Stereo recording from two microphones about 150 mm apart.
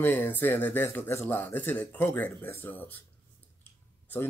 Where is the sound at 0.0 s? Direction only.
10° left (ahead or behind).